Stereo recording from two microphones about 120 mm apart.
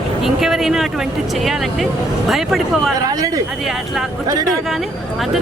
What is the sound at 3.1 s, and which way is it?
Speech, 30° right (ahead or behind).